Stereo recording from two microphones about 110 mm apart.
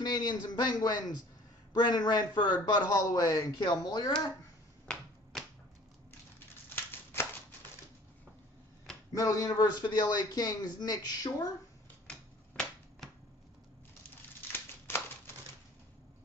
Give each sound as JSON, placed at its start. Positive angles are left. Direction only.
{"t": 0.0, "sound": "a man's voice", "side_deg": 40}
{"t": 5.3, "sound": "finger snapping", "side_deg": 0}
{"t": 6.7, "sound": "a sound", "side_deg": 20}
{"t": 9.1, "sound": "a man's voice", "side_deg": 30}
{"t": 12.1, "sound": "typewriter", "side_deg": 10}
{"t": 14.9, "sound": "a sound", "side_deg": 20}